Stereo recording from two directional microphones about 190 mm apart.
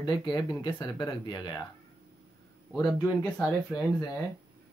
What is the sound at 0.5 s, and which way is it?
Speech, 25° left (ahead or behind).